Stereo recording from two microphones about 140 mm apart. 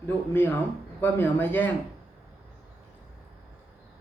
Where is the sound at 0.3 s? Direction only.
15° left (ahead or behind).